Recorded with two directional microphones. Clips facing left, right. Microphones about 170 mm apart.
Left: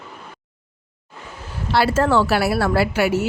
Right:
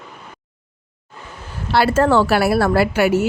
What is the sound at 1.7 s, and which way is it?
A woman's voice, 55° right (ahead or behind).